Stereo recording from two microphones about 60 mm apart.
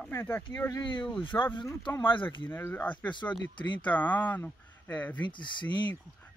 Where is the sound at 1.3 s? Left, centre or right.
Left.